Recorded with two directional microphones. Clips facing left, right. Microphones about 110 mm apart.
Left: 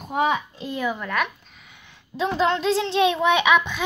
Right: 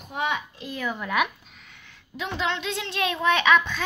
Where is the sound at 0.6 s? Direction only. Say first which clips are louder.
Left 5 dB; 25° left (ahead or behind).